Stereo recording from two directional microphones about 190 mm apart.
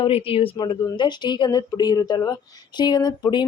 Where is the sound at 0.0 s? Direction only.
30° left (ahead or behind).